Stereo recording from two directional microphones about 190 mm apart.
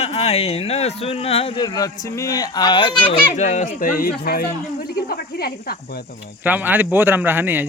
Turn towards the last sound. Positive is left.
turn(degrees=-10)  # may be behind; listen again after turning